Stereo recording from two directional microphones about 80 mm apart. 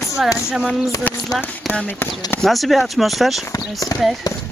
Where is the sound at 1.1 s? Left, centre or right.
Left.